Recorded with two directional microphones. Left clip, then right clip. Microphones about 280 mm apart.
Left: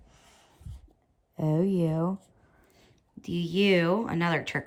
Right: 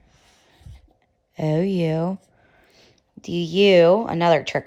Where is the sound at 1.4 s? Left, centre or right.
Right.